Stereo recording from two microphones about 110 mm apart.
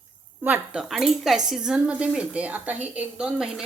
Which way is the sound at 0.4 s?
10° right (ahead or behind).